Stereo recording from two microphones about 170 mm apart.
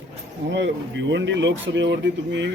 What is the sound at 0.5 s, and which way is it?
Speech, 90° right.